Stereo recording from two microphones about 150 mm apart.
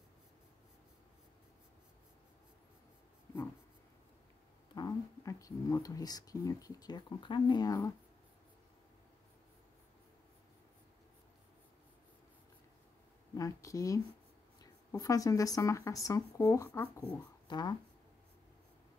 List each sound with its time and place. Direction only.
3.3 s writing: 20° left (ahead or behind)
4.7 s speech: 25° left (ahead or behind)
13.4 s speech: 20° left (ahead or behind)
17.5 s speech: 30° left (ahead or behind)